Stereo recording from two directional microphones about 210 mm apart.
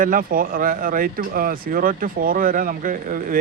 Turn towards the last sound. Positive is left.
turn(degrees=-40)  # may be behind; listen again after turning